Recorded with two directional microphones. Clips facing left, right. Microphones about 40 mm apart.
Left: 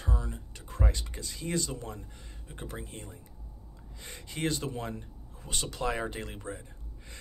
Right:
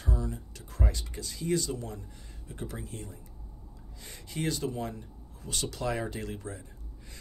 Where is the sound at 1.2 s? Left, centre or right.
Centre.